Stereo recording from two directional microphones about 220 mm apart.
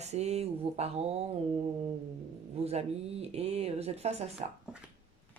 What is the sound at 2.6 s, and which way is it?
Speech, 30° right (ahead or behind).